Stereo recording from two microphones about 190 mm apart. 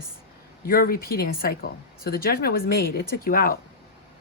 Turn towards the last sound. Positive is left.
turn(degrees=50)  # may be behind; listen again after turning